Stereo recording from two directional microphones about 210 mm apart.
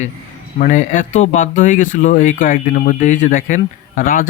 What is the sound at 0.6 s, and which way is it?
Speech, 35° left (ahead or behind).